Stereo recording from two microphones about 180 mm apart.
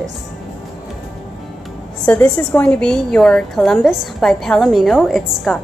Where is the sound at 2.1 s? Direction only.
5° left (ahead or behind).